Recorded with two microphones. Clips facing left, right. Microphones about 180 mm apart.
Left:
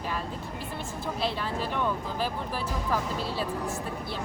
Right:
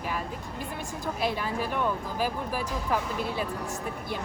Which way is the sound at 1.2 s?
10° right (ahead or behind).